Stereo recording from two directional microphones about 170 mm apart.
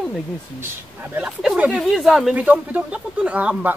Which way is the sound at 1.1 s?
5° right (ahead or behind).